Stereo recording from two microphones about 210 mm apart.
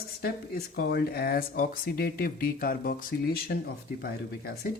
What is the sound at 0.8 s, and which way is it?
Speech, 50° left (ahead or behind).